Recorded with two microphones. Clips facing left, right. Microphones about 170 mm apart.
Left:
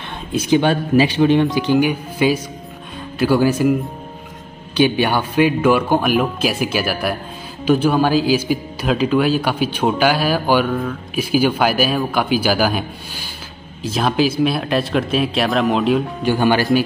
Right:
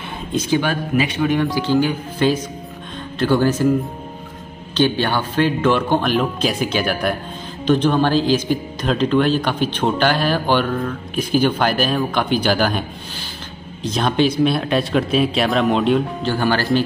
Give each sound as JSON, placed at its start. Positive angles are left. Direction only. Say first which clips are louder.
{"t": 0.3, "sound": "speech", "louder": "left 3 dB", "side_deg": 10}
{"t": 0.6, "sound": "speech", "louder": "left 7 dB", "side_deg": 30}
{"t": 4.7, "sound": "speech", "louder": "left 2 dB", "side_deg": 10}
{"t": 13.8, "sound": "speech", "louder": "even", "side_deg": 5}
{"t": 16.2, "sound": "speech", "louder": "left 3 dB", "side_deg": 15}